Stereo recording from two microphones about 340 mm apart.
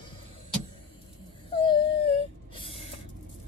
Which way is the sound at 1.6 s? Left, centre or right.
Centre.